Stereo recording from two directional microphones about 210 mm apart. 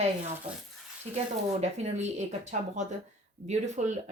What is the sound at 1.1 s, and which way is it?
Speech, 30° right (ahead or behind).